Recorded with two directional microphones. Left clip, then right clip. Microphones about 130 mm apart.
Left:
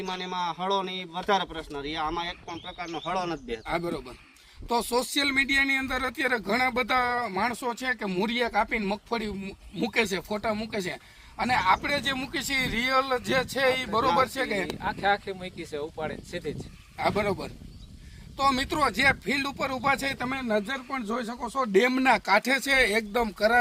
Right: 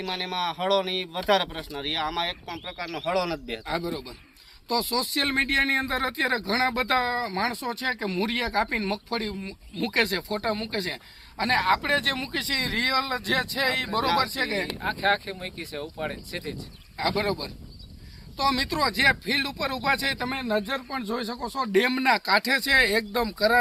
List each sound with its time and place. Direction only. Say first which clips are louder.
0.0 s a man's voice: right 2 dB; 30° right (ahead or behind)
3.7 s speech: even; 45° left (ahead or behind)
14.8 s speech: right 2 dB; 10° right (ahead or behind)
17.0 s speech: even; 50° left (ahead or behind)